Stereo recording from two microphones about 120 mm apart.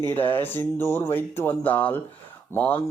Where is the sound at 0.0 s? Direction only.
20° left (ahead or behind).